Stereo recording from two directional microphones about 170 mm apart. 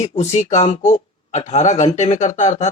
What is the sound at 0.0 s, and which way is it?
Speech, 40° left (ahead or behind).